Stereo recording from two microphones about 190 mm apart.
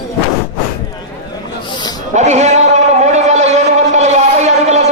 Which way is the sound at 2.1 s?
35° right (ahead or behind).